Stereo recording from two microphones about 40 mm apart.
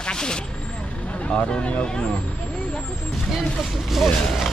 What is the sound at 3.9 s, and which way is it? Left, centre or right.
Speech, centre.